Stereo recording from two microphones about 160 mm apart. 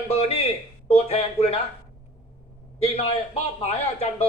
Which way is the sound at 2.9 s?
40° left (ahead or behind).